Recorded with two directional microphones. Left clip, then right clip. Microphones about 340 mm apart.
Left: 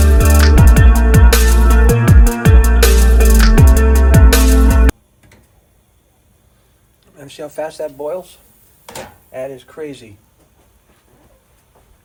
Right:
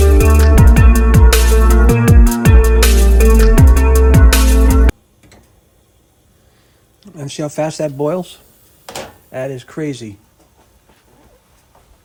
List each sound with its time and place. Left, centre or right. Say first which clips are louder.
0.2 s music: right 1 dB; centre
7.0 s speech: right 6 dB; centre